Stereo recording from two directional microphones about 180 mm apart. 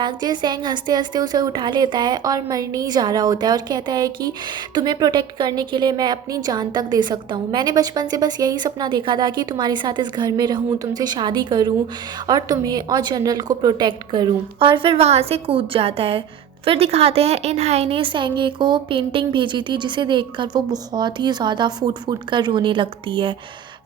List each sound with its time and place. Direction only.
0.0 s a woman's voice: 25° right (ahead or behind)